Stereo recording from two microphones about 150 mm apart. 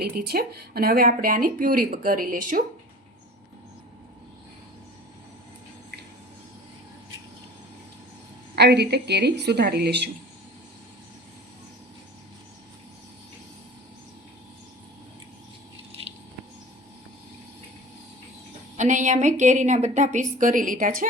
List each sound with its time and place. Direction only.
0.0 s a woman's voice: 85° right; by 2.6 s 65° right (ahead or behind)
8.5 s a woman's voice: 90° right
18.8 s a woman's voice: 55° right (ahead or behind)